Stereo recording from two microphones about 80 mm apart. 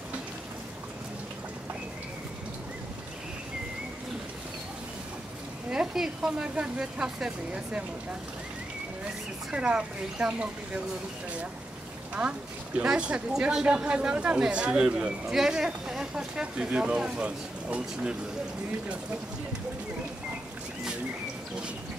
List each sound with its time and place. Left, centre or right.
5.7 s speech: centre
9.5 s speech: centre
12.2 s speech: centre